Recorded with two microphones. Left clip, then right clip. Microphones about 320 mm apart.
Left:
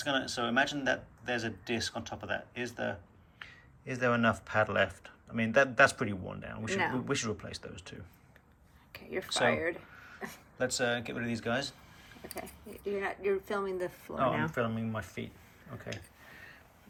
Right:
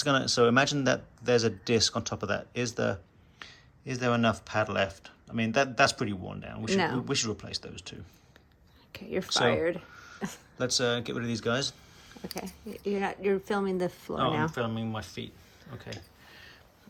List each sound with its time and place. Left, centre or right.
0.0 s speech: centre
8.9 s speech: right
9.9 s throat clearing: centre
10.2 s speech: right
10.6 s speech: centre
12.3 s speech: right
14.5 s speech: centre